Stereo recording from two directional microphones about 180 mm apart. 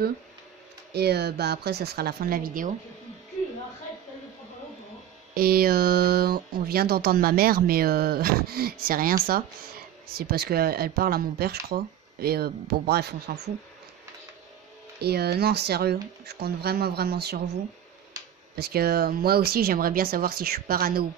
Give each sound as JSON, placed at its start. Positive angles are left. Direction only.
{"t": 0.9, "sound": "speech", "side_deg": -65}
{"t": 5.3, "sound": "speech", "side_deg": -55}
{"t": 15.0, "sound": "speech", "side_deg": -65}
{"t": 18.6, "sound": "speech", "side_deg": -60}